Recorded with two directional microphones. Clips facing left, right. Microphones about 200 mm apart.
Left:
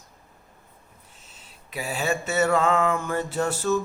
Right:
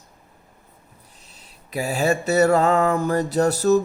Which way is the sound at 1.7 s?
40° right (ahead or behind).